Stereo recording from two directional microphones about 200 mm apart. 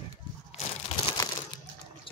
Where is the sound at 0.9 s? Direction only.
30° left (ahead or behind).